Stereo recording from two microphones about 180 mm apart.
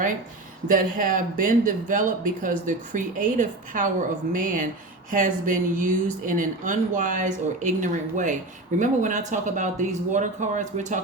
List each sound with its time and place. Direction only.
0.7 s speech: 50° right (ahead or behind)